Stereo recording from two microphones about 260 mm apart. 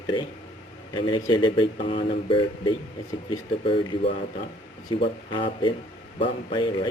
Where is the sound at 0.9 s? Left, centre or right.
Centre.